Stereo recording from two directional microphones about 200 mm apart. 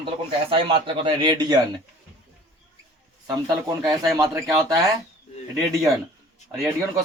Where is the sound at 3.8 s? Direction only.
Centre (ahead or behind).